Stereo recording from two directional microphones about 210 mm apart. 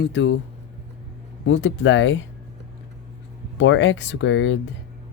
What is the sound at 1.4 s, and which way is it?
Speech, 65° left (ahead or behind).